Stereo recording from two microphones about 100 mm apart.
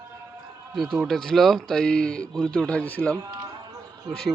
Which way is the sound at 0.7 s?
Centre (ahead or behind).